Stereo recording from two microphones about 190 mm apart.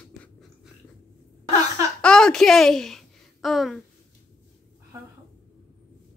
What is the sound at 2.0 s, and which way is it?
A woman's voice, 5° left (ahead or behind).